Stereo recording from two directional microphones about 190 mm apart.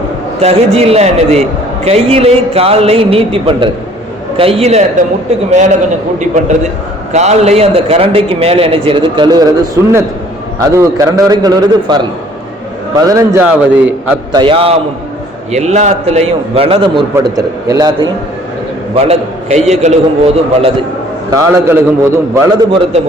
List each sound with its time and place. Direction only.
0.3 s a man's voice: 30° right (ahead or behind)
7.1 s a man's voice: 35° right (ahead or behind); by 11.9 s 20° right (ahead or behind)
13.0 s a man's voice: 15° right (ahead or behind)
14.3 s a man's voice: 25° right (ahead or behind)
18.9 s a man's voice: 35° right (ahead or behind)
21.2 s a man's voice: 15° right (ahead or behind)